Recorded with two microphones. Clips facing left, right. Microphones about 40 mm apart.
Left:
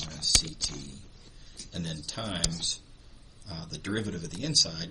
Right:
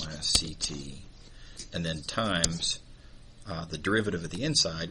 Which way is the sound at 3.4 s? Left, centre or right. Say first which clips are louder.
Right 7 dB; right.